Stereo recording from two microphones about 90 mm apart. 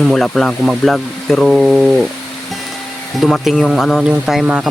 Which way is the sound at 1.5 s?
5° right (ahead or behind).